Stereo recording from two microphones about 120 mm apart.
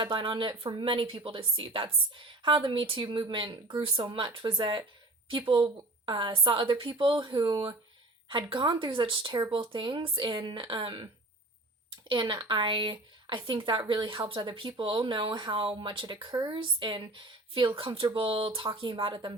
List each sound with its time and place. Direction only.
0.0 s a woman's voice: 40° right (ahead or behind)